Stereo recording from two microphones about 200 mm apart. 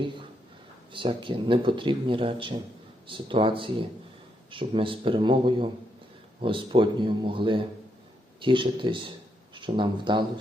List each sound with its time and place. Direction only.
0.9 s a man's voice: 25° right (ahead or behind)